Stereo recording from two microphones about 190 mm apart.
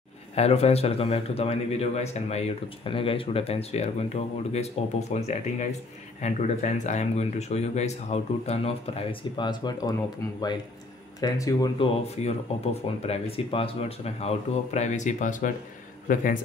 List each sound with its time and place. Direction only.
0.4 s a man's voice: 35° left (ahead or behind)
11.1 s speech: 15° left (ahead or behind)
11.8 s a man's voice: 30° left (ahead or behind)